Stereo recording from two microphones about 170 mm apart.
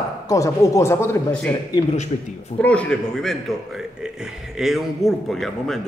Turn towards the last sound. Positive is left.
turn(degrees=0)  # may be behind; listen again after turning